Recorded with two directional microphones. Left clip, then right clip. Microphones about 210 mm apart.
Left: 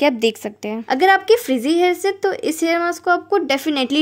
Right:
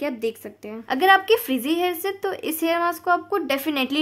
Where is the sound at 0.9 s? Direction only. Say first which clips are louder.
Left 3 dB; 20° left (ahead or behind).